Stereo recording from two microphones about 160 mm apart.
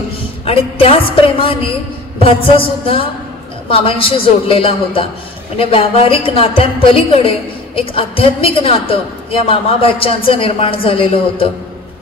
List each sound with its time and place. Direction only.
0.5 s a woman's voice: 35° left (ahead or behind)